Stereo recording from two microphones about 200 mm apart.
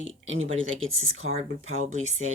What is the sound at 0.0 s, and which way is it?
Speech, 75° right (ahead or behind).